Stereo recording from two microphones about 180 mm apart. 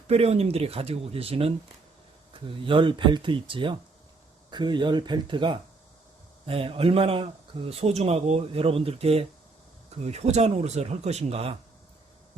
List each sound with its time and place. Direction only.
0.1 s speech: 35° right (ahead or behind)